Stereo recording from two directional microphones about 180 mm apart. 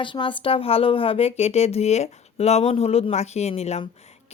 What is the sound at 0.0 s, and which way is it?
Speech, 25° left (ahead or behind).